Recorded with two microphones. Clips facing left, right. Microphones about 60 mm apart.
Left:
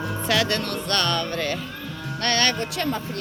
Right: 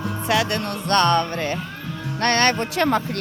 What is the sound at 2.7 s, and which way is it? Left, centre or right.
Speech, right.